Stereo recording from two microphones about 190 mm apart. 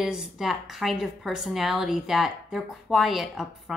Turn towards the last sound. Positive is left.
turn(degrees=0)  # may be behind; listen again after turning